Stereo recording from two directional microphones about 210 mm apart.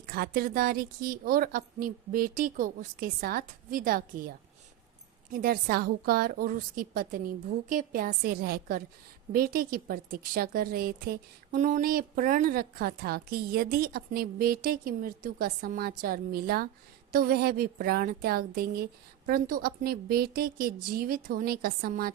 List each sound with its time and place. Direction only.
0.0 s a woman's voice: 45° right (ahead or behind)